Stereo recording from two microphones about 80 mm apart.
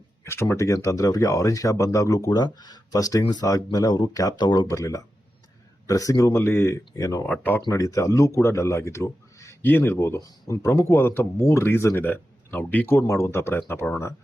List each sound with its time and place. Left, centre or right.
0.4 s speech: left
4.4 s speech: left
4.7 s speech: left
7.3 s speech: left
7.7 s speech: left
9.6 s speech: left
10.2 s speech: left
10.6 s speech: left
13.0 s speech: left